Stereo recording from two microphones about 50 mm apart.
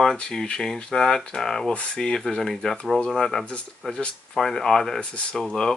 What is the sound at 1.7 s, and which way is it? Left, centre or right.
Speech, left.